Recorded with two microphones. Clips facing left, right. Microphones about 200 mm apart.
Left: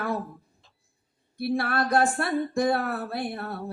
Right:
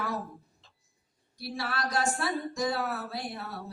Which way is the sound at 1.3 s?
55° left (ahead or behind).